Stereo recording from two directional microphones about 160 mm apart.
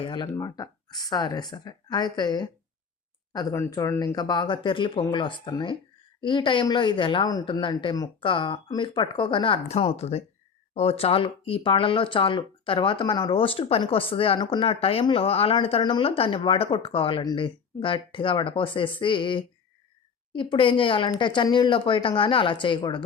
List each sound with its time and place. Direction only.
0.0 s speech: 30° left (ahead or behind)
9.6 s speech: 45° left (ahead or behind)